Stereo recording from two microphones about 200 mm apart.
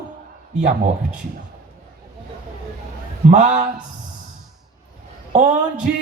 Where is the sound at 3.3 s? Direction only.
40° right (ahead or behind).